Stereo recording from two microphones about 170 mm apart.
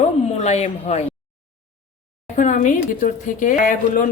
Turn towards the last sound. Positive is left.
turn(degrees=50)  # may be behind; listen again after turning